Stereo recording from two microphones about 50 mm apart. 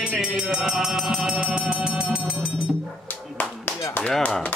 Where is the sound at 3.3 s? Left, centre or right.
Left.